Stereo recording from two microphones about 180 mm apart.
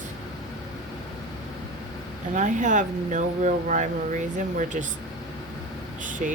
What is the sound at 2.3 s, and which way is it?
Speech, 45° right (ahead or behind).